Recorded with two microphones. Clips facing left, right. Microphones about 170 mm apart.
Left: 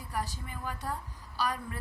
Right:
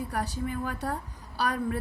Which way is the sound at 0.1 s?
65° right (ahead or behind).